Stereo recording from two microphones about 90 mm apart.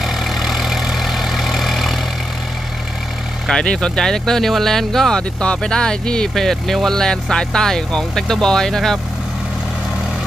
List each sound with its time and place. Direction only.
0.0 s vehicle: centre (ahead or behind)
3.4 s speech: 10° left (ahead or behind)